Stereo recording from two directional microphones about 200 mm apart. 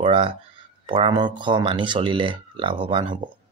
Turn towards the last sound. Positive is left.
turn(degrees=-25)  # may be behind; listen again after turning